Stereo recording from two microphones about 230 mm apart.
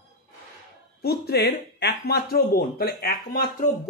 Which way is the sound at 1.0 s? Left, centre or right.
Left.